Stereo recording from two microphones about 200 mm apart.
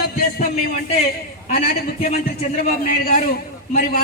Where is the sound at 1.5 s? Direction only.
45° left (ahead or behind).